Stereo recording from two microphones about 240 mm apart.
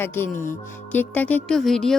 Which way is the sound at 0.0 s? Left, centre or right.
Centre.